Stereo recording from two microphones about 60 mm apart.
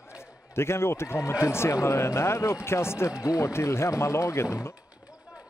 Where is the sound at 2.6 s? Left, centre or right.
Left.